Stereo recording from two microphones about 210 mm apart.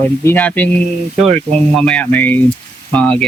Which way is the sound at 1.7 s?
5° left (ahead or behind).